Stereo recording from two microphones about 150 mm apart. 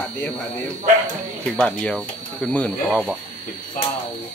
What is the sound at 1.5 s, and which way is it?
Speech, 5° left (ahead or behind).